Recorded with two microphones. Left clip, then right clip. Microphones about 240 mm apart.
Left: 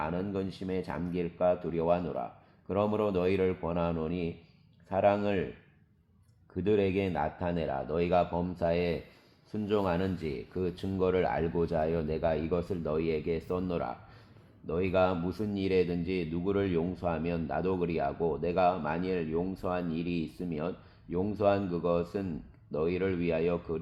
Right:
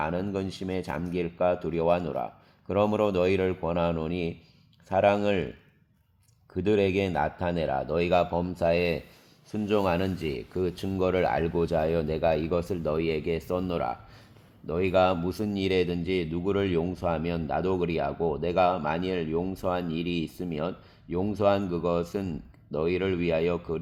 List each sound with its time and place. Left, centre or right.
0.0 s speech: right
6.5 s speech: right